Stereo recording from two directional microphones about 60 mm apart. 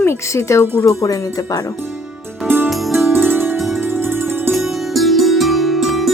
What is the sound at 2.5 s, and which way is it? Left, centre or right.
Music, right.